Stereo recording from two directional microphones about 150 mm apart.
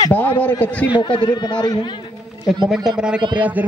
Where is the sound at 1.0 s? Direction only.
30° left (ahead or behind).